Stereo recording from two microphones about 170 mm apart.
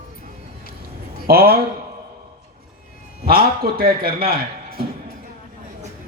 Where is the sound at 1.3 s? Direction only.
65° right (ahead or behind).